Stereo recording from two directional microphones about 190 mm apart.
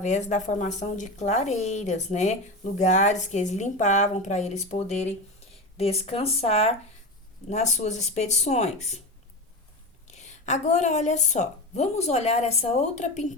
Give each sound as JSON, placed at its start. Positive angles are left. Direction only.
{"t": 0.0, "sound": "speech", "side_deg": 40}
{"t": 10.1, "sound": "speech", "side_deg": 35}